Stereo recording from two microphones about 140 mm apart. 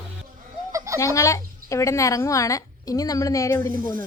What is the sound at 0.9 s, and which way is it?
A woman's voice, 20° left (ahead or behind).